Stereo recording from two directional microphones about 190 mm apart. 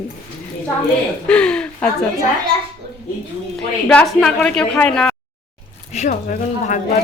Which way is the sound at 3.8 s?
5° left (ahead or behind).